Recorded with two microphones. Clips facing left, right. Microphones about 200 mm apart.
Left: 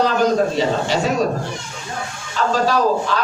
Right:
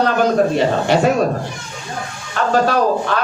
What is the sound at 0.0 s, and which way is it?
Speech, 55° right (ahead or behind).